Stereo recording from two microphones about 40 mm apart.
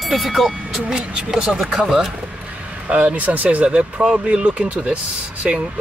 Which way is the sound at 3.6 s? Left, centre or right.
Right.